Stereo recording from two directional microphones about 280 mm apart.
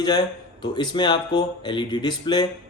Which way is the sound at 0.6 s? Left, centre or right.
Centre.